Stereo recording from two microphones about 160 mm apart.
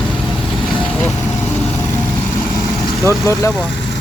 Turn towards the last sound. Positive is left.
turn(degrees=20)  # may be behind; listen again after turning